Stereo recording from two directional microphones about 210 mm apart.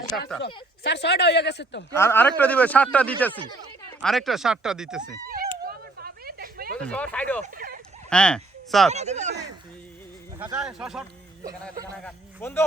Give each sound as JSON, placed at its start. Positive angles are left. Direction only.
{"t": 0.4, "sound": "speech", "side_deg": 55}
{"t": 1.9, "sound": "speech", "side_deg": 10}
{"t": 5.6, "sound": "a sound", "side_deg": -45}
{"t": 6.7, "sound": "speech", "side_deg": 5}
{"t": 7.4, "sound": "speech", "side_deg": -40}
{"t": 8.1, "sound": "speech", "side_deg": 5}
{"t": 8.9, "sound": "speech", "side_deg": -30}
{"t": 10.3, "sound": "speech", "side_deg": -10}
{"t": 12.0, "sound": "speech", "side_deg": 10}